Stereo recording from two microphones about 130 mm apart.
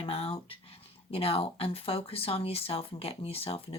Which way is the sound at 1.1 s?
50° left (ahead or behind).